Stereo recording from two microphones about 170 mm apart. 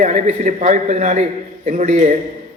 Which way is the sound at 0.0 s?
45° right (ahead or behind).